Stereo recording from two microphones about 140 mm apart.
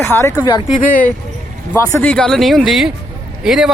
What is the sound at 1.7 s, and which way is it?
Speech, 15° left (ahead or behind).